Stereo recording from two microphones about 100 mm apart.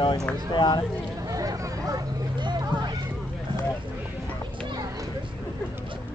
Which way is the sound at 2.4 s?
45° right (ahead or behind).